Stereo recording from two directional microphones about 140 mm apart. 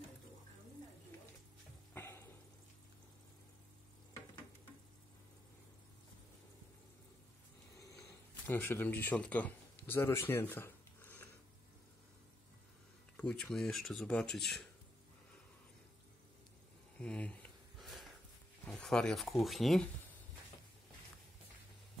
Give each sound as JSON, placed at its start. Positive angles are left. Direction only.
{"t": 2.0, "sound": "frying", "side_deg": 20}
{"t": 7.7, "sound": "a sound", "side_deg": 25}
{"t": 8.5, "sound": "speech", "side_deg": 15}
{"t": 13.1, "sound": "speech", "side_deg": 5}
{"t": 17.0, "sound": "a sound", "side_deg": 10}
{"t": 18.7, "sound": "speech", "side_deg": 5}